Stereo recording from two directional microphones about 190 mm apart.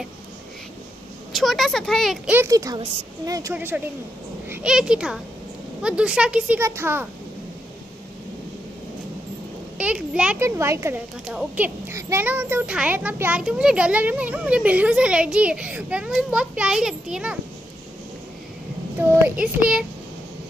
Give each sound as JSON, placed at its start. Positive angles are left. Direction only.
{"t": 1.3, "sound": "a child's voice", "side_deg": 0}
{"t": 2.3, "sound": "a child's voice", "side_deg": -15}
{"t": 3.5, "sound": "a child's voice", "side_deg": -10}
{"t": 9.8, "sound": "a child's voice", "side_deg": -5}
{"t": 18.9, "sound": "a child's voice", "side_deg": -5}